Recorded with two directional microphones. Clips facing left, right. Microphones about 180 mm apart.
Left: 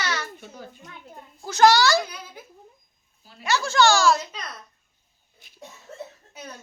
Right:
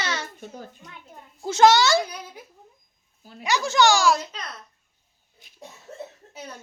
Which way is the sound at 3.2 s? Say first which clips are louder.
Right 6 dB; 50° right (ahead or behind).